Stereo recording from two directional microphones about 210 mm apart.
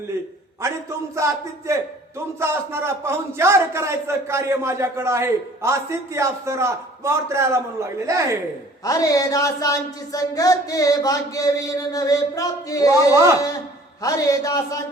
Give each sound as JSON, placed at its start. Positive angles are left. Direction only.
{"t": 1.1, "sound": "a man's voice", "side_deg": -15}
{"t": 8.8, "sound": "speech", "side_deg": 15}